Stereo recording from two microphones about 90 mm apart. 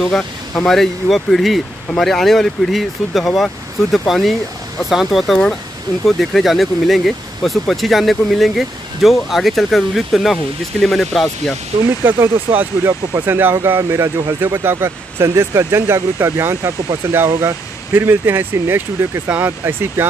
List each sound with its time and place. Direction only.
0.0 s speech: 5° left (ahead or behind)
12.0 s speech: 25° right (ahead or behind)
17.9 s speech: 25° right (ahead or behind)